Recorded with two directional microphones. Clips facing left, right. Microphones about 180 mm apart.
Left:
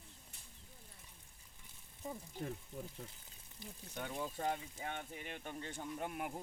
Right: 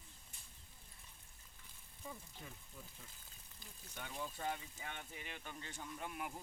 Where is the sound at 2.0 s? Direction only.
40° left (ahead or behind).